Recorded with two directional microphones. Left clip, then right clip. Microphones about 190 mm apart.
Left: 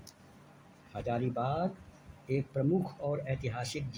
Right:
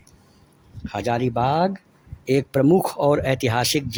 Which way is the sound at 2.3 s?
75° right (ahead or behind).